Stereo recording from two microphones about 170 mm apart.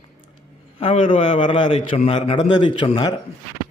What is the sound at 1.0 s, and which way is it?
A man's voice, 30° left (ahead or behind).